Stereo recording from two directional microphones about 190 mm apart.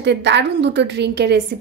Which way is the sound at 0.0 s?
65° right (ahead or behind).